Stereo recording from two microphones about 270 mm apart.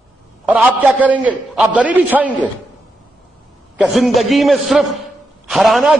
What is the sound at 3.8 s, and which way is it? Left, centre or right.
A man's voice, centre.